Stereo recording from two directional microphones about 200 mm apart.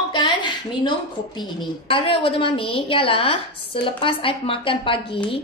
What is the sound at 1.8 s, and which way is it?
A woman's voice, 25° left (ahead or behind).